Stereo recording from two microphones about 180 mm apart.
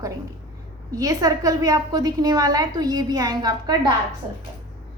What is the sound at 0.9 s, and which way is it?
A woman's voice, 20° right (ahead or behind).